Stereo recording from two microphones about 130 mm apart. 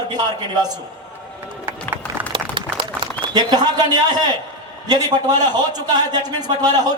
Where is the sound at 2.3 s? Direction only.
40° right (ahead or behind).